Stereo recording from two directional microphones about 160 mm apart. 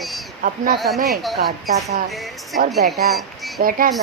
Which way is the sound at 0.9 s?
70° right (ahead or behind).